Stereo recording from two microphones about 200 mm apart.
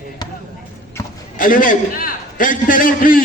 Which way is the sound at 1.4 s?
45° left (ahead or behind).